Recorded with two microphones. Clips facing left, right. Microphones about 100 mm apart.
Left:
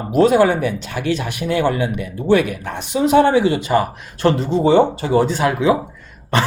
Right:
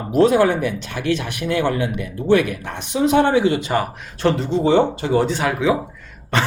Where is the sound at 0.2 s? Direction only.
30° left (ahead or behind); by 4.4 s 50° left (ahead or behind).